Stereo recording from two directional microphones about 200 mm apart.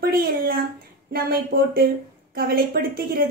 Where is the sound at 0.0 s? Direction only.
50° right (ahead or behind).